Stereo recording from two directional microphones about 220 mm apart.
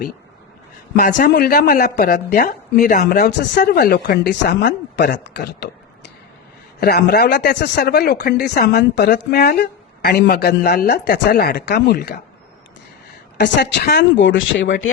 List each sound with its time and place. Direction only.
0.9 s speech: 40° left (ahead or behind)
6.7 s speech: 45° left (ahead or behind)
13.4 s a woman's voice: 50° left (ahead or behind)